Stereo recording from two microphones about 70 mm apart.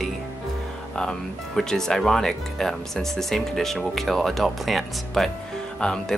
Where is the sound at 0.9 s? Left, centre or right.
Centre.